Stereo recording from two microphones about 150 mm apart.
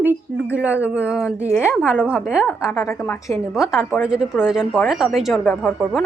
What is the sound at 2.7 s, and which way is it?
Speech, 20° left (ahead or behind).